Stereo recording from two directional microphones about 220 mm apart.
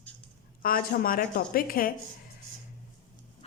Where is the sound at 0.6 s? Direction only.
40° left (ahead or behind).